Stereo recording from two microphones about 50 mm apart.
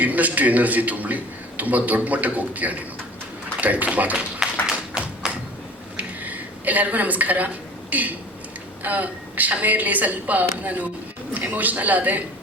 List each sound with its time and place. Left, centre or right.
0.0 s a man's voice: right
4.6 s tap: centre
6.0 s a sound: right
8.8 s a man's voice: right